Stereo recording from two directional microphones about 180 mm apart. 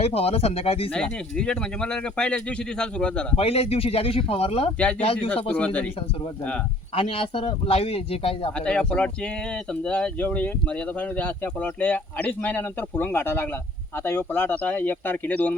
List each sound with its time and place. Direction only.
0.0 s a man's voice: 35° left (ahead or behind)
0.9 s speech: 5° left (ahead or behind)
3.3 s a man's voice: 35° left (ahead or behind)
5.5 s speech: 5° left (ahead or behind)
6.9 s a man's voice: 30° left (ahead or behind)
8.5 s speech: 5° left (ahead or behind)